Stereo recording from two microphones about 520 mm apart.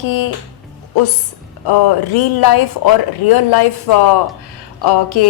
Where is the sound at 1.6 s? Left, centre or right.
Left.